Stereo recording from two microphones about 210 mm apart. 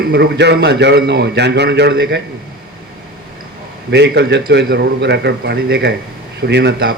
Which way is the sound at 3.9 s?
55° right (ahead or behind).